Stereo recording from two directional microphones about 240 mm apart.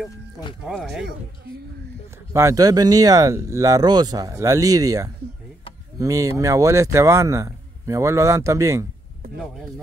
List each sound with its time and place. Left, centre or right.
0.7 s speech: centre
2.3 s a man's voice: centre